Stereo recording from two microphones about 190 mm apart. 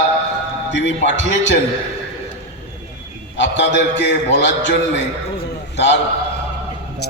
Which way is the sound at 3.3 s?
70° left (ahead or behind).